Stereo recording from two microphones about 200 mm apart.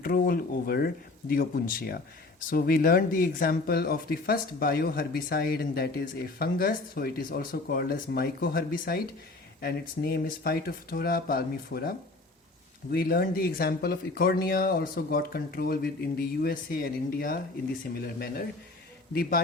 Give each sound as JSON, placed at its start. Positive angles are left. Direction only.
{"t": 0.0, "sound": "speech", "side_deg": 45}
{"t": 19.1, "sound": "speech", "side_deg": 50}